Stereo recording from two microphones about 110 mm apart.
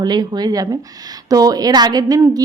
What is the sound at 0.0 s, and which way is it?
A woman's voice, 35° right (ahead or behind).